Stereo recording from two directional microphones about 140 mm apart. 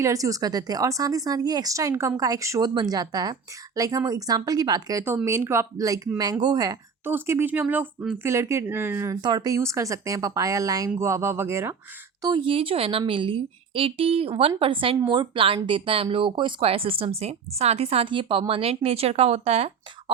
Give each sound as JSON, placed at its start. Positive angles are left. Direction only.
{"t": 0.0, "sound": "speech", "side_deg": -25}
{"t": 9.2, "sound": "speech", "side_deg": -30}
{"t": 12.2, "sound": "speech", "side_deg": -35}